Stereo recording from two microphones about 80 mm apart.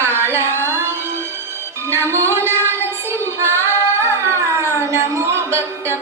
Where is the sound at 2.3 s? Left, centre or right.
Right.